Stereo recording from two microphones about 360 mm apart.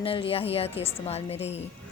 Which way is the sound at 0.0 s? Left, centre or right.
Centre.